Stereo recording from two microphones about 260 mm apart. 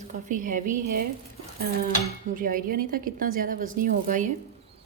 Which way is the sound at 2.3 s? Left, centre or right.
Right.